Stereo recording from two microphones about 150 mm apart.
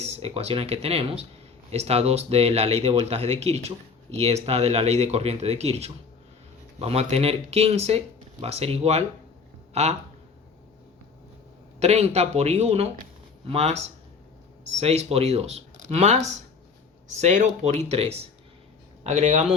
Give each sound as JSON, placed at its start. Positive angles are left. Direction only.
{"t": 0.0, "sound": "speech", "side_deg": -45}
{"t": 11.8, "sound": "speech", "side_deg": -45}